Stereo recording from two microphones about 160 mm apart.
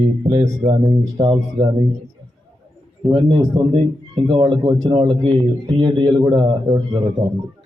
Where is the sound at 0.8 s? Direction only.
25° right (ahead or behind).